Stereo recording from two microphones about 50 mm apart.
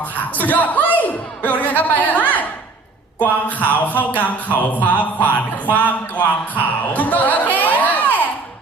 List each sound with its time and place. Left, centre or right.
0.3 s music: left
3.2 s speech: left